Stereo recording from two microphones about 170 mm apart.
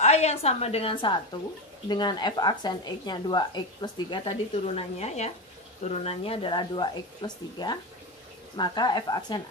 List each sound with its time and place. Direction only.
0.0 s a woman's voice: 40° left (ahead or behind); by 9.4 s 25° left (ahead or behind)